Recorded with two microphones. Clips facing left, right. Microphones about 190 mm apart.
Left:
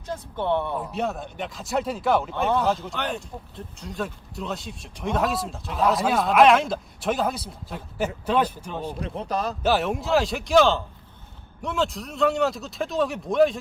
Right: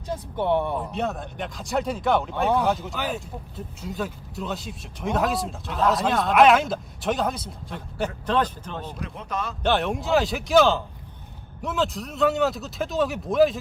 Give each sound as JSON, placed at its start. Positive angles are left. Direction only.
{"t": 0.1, "sound": "speech", "side_deg": -10}
{"t": 0.8, "sound": "speech", "side_deg": 0}
{"t": 9.0, "sound": "speech", "side_deg": 35}
{"t": 9.6, "sound": "speech", "side_deg": 0}